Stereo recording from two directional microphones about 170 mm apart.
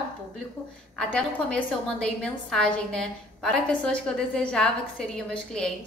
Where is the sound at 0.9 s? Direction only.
5° left (ahead or behind).